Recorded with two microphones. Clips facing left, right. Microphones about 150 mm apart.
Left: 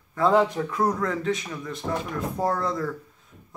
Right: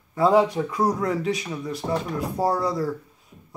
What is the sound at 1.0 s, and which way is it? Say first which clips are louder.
Speech: right 2 dB; 15° right (ahead or behind).